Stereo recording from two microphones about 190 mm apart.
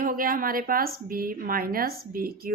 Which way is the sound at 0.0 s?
50° right (ahead or behind).